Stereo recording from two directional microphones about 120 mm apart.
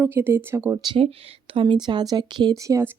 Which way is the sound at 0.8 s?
45° right (ahead or behind).